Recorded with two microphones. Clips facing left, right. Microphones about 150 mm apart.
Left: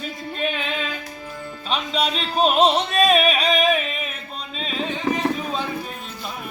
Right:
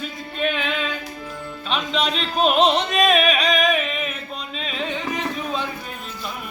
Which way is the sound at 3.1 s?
35° left (ahead or behind).